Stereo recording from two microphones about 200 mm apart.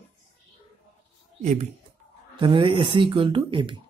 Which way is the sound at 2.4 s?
25° right (ahead or behind).